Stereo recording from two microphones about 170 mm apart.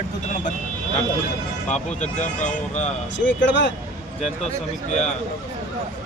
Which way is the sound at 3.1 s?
90° left.